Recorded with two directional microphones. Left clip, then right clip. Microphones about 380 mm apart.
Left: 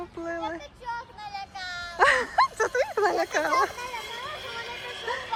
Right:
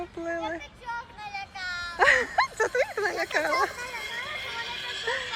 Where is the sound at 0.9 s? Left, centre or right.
Left.